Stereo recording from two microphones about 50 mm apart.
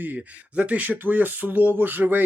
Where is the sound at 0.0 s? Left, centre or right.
Right.